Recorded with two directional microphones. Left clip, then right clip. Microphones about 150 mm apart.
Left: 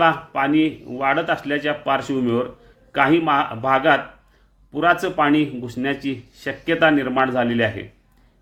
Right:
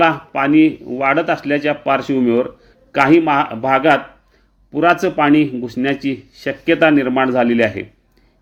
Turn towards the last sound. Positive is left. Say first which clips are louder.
# right 5 dB
turn(degrees=-35)  # may be behind; listen again after turning